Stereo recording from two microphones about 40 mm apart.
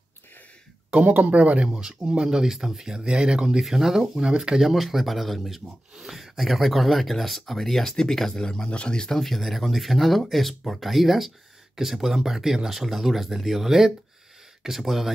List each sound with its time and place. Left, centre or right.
0.9 s speech: right
1.7 s speech: centre
3.0 s speech: right
3.6 s speech: centre
4.2 s speech: centre; by 9.1 s left
9.1 s speech: centre